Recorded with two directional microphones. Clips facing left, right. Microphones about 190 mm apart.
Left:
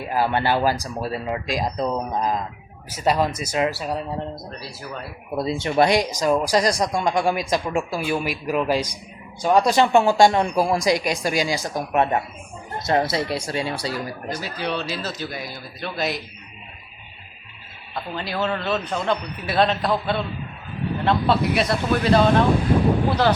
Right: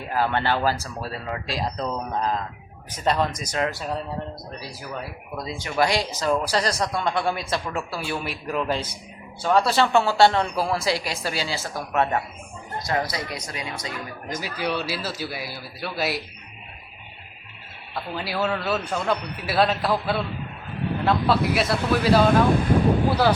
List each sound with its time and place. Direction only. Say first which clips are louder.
0.0 s speech: left 2 dB; 10° left (ahead or behind)
5.4 s speech: left 5 dB; 25° left (ahead or behind)
14.4 s speech: right 1 dB; 10° right (ahead or behind)
17.9 s a man's voice: left 1 dB; 5° right (ahead or behind)